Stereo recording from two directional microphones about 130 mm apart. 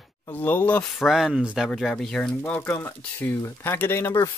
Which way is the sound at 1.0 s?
5° right (ahead or behind).